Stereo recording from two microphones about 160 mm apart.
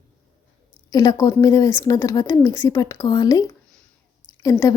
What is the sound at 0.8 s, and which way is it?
Speech, 20° left (ahead or behind).